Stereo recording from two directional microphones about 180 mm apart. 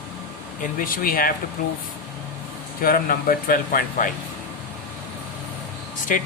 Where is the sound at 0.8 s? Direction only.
50° left (ahead or behind).